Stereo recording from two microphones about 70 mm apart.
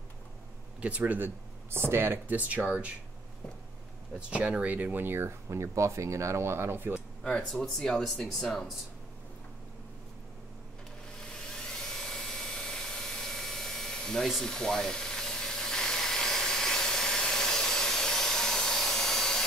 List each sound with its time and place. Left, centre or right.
0.7 s speech: centre
1.7 s speech: right
4.2 s speech: centre; by 7.0 s right
7.6 s speech: centre
11.5 s tools: centre